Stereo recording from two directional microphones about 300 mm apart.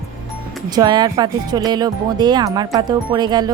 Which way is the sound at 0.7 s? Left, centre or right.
Centre.